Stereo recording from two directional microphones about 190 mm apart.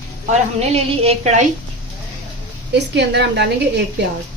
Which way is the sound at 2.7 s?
65° right (ahead or behind).